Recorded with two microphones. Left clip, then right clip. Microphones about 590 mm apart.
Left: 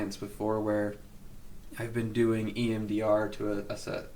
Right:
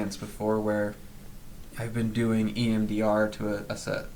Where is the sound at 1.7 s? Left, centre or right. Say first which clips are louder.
Right 1 dB; left.